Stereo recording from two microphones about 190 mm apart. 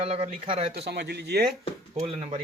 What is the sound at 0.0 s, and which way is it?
Speech, 30° right (ahead or behind).